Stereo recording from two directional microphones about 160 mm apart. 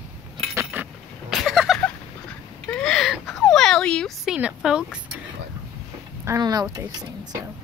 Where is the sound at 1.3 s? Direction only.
Centre (ahead or behind).